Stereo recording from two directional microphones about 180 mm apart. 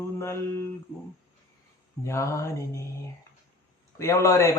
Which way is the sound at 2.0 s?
15° left (ahead or behind).